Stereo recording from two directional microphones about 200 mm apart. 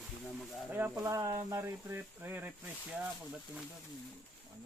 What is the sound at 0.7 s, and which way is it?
Speech, 15° right (ahead or behind).